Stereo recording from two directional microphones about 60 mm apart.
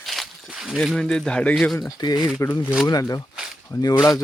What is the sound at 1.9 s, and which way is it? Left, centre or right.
Speech, left.